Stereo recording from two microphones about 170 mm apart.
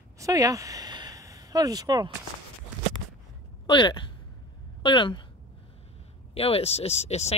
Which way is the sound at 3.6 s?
30° left (ahead or behind).